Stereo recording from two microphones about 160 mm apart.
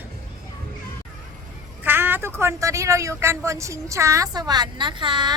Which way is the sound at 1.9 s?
15° right (ahead or behind).